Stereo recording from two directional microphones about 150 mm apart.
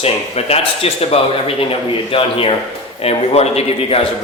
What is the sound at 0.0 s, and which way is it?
A man's voice, 40° left (ahead or behind).